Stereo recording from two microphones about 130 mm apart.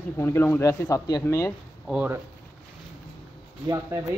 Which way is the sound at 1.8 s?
10° right (ahead or behind).